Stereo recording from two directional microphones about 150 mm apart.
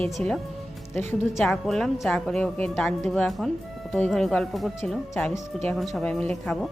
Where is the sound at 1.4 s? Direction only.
5° left (ahead or behind).